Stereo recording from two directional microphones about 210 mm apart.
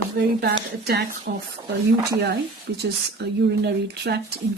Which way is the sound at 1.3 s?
45° right (ahead or behind).